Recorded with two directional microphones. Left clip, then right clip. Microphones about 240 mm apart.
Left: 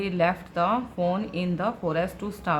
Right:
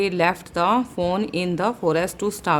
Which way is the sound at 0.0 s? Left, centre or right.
Right.